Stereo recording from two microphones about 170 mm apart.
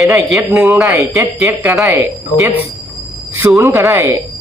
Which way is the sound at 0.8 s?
15° right (ahead or behind).